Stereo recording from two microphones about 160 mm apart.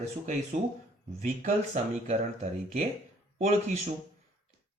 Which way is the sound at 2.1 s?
45° right (ahead or behind).